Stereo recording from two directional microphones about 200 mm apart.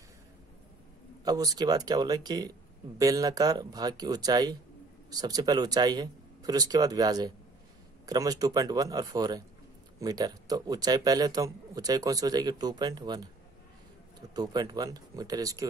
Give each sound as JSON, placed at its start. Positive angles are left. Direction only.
{"t": 1.2, "sound": "a man's voice", "side_deg": -20}
{"t": 14.3, "sound": "a man's voice", "side_deg": -20}